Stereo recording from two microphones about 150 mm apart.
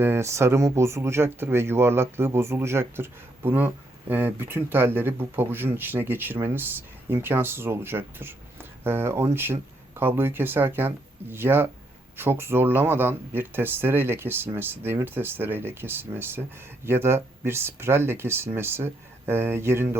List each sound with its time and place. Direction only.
0.0 s speech: 15° right (ahead or behind)